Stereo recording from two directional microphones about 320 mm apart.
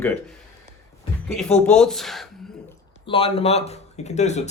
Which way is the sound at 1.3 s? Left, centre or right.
Centre.